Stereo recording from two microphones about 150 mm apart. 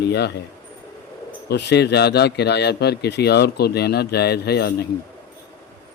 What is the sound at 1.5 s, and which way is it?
Speech, 90° left.